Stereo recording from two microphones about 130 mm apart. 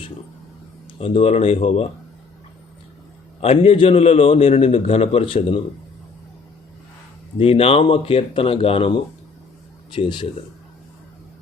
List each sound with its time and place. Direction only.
0.9 s a man's voice: 50° left (ahead or behind)
3.4 s a man's voice: 50° left (ahead or behind)
7.3 s a man's voice: 45° left (ahead or behind)
9.9 s speech: 40° left (ahead or behind)